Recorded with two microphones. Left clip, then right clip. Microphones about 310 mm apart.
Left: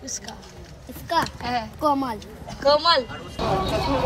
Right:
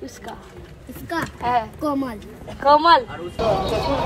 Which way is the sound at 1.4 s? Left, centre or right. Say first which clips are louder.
Right 6 dB; centre.